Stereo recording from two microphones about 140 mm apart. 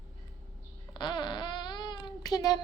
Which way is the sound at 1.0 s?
35° left (ahead or behind).